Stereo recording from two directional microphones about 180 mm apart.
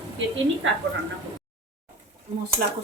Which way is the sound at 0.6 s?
90° right.